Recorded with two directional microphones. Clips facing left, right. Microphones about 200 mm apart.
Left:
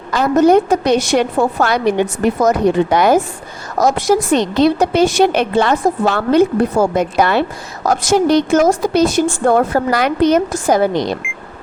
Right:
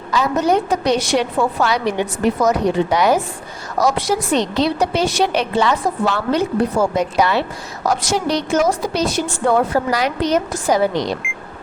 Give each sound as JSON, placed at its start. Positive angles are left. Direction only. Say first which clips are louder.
{"t": 0.1, "sound": "a woman's voice", "louder": "left 6 dB", "side_deg": 55}